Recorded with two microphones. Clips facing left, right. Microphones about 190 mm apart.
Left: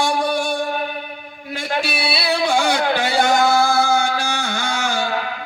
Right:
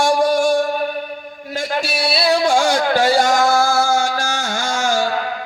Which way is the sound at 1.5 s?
60° left (ahead or behind).